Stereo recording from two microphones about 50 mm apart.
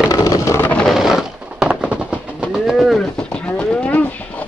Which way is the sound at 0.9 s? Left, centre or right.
Centre.